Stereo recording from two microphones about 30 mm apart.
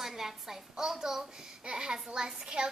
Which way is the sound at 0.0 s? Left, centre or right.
Centre.